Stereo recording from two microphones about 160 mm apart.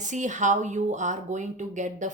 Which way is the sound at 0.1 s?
50° right (ahead or behind).